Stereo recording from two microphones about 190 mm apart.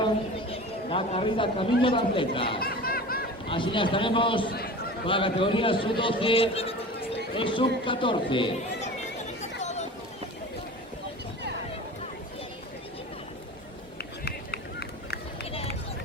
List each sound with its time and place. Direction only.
0.5 s speech: 30° left (ahead or behind)
2.6 s a sound: 50° left (ahead or behind)
3.5 s a man's voice: 25° left (ahead or behind)
4.5 s chatter: 55° left (ahead or behind)
5.0 s a man's voice: 25° left (ahead or behind)
9.4 s a sound: 35° left (ahead or behind)
14.0 s run: 60° left (ahead or behind)